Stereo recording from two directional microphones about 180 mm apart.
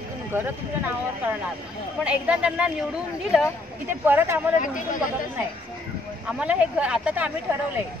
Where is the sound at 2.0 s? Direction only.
5° right (ahead or behind).